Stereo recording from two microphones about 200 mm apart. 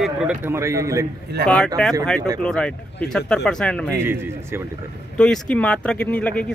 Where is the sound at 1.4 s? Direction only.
55° right (ahead or behind).